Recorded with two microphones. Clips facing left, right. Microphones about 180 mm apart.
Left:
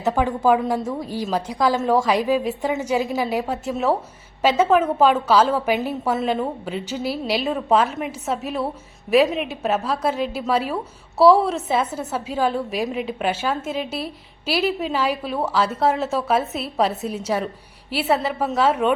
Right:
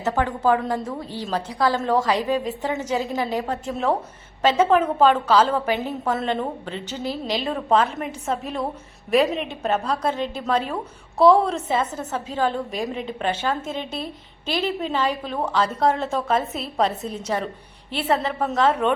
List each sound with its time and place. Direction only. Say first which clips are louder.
0.0 s a woman's voice: left 2 dB; 10° left (ahead or behind)